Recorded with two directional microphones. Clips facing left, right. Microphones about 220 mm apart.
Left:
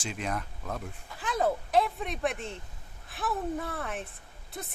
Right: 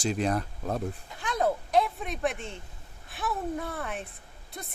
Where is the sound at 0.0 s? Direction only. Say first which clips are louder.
Right 7 dB; 35° right (ahead or behind).